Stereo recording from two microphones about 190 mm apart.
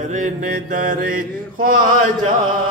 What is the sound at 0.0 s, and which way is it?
Mantra, 40° right (ahead or behind).